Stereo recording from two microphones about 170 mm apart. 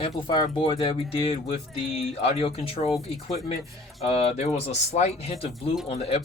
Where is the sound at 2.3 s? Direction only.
35° left (ahead or behind).